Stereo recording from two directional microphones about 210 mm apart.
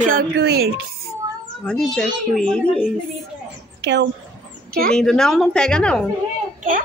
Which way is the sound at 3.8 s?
55° right (ahead or behind).